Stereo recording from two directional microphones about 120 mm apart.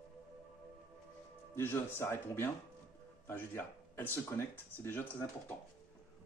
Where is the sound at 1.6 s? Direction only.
20° left (ahead or behind).